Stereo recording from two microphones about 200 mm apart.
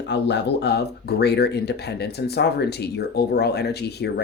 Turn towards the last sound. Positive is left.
turn(degrees=55)  # may be behind; listen again after turning